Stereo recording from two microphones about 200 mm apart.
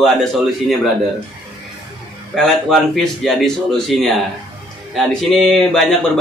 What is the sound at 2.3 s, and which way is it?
A man's voice, centre (ahead or behind).